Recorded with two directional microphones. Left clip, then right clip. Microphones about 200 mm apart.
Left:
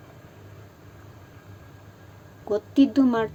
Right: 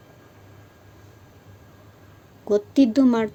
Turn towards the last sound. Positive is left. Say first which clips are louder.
# right 2 dB
turn(degrees=-35)  # may be behind; listen again after turning